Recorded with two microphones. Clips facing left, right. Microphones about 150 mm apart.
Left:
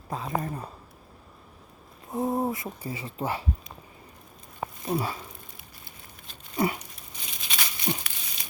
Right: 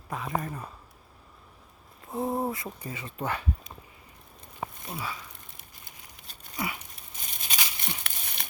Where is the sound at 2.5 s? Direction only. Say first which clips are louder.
Left 3 dB; 25° left (ahead or behind).